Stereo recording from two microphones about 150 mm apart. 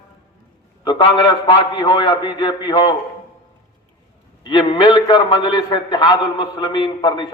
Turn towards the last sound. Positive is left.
turn(degrees=30)  # may be behind; listen again after turning